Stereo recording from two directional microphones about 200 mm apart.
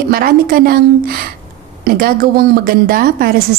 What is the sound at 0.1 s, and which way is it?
A woman's voice, 45° right (ahead or behind).